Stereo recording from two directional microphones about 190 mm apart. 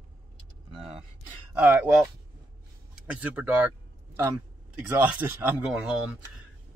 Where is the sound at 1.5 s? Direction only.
10° right (ahead or behind).